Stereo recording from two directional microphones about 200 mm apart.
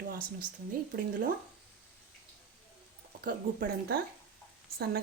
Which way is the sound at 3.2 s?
50° right (ahead or behind).